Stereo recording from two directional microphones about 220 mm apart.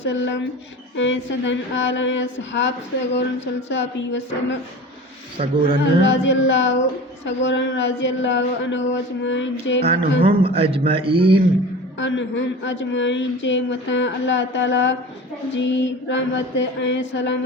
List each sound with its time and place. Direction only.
0.0 s a woman's voice: 55° left (ahead or behind)
5.4 s a man's voice: 20° right (ahead or behind)
6.0 s speech: 55° left (ahead or behind)
10.2 s a man's voice: 25° right (ahead or behind)
11.9 s speech: 55° left (ahead or behind)